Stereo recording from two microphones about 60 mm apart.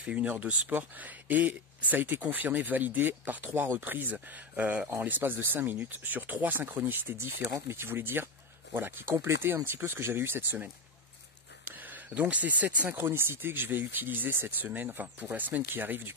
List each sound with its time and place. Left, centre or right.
0.0 s speech: centre; by 10.6 s right
11.6 s a sound: right
12.9 s speech: right